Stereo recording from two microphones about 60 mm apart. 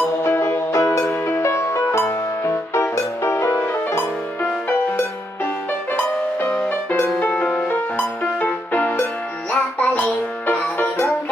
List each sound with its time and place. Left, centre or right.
0.7 s music: left
4.6 s music: left
7.2 s music: left